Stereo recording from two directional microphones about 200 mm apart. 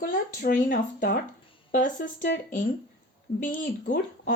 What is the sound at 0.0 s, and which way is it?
Speech, 45° left (ahead or behind).